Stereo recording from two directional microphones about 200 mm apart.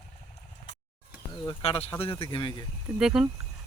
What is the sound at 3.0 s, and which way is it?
Speech, 5° right (ahead or behind).